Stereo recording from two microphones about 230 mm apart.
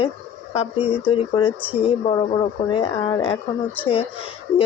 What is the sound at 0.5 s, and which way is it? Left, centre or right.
Speech, left.